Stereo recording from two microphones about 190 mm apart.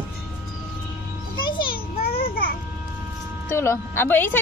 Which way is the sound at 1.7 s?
50° left (ahead or behind).